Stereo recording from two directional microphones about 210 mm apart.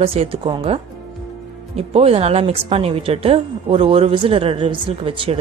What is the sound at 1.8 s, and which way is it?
A woman's voice, 30° right (ahead or behind).